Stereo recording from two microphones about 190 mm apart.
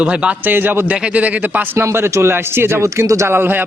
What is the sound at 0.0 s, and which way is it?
A man's voice, 5° right (ahead or behind).